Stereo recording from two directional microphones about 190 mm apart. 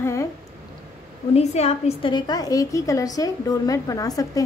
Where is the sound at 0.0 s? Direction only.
15° left (ahead or behind).